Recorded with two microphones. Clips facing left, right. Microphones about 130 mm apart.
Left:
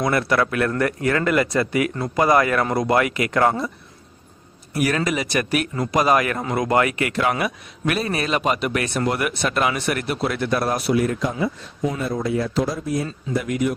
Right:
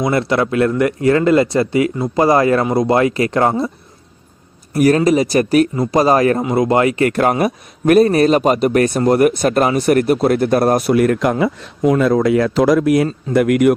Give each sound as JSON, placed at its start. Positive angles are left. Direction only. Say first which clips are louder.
{"t": 0.0, "sound": "speech", "louder": "right 4 dB", "side_deg": -25}
{"t": 4.7, "sound": "speech", "louder": "right 9 dB", "side_deg": -40}
{"t": 7.1, "sound": "a man's voice", "louder": "right 7 dB", "side_deg": -45}
{"t": 13.3, "sound": "a man's voice", "louder": "right 10 dB", "side_deg": -65}